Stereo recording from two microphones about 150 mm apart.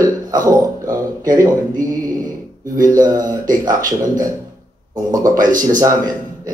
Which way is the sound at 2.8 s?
25° right (ahead or behind).